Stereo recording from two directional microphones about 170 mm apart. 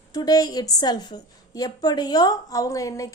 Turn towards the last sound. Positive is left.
turn(degrees=20)  # may be behind; listen again after turning